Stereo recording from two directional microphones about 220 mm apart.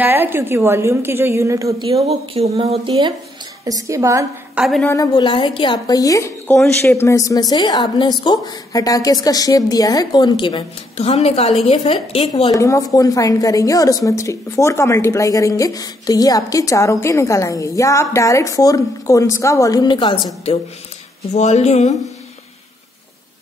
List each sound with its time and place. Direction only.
0.0 s a woman's voice: 10° right (ahead or behind)
1.9 s speech: 25° right (ahead or behind)
3.6 s a woman's voice: 15° right (ahead or behind)
4.6 s a woman's voice: centre (ahead or behind)
4.9 s a woman's voice: 20° left (ahead or behind)
12.5 s a woman's voice: 15° left (ahead or behind); by 21.9 s 30° left (ahead or behind)